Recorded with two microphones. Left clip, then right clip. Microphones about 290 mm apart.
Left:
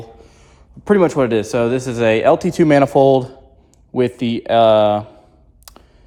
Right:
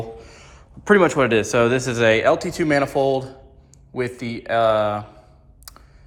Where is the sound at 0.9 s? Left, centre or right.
Left.